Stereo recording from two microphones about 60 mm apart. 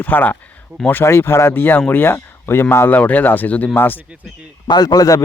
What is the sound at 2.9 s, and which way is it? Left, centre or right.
Speech, left.